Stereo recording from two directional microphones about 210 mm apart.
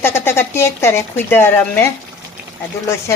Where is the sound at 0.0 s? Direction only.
10° left (ahead or behind).